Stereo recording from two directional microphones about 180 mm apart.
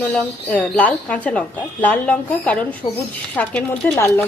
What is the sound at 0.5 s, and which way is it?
Speech, 5° left (ahead or behind).